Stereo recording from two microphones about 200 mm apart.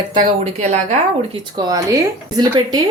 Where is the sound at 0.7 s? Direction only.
35° right (ahead or behind).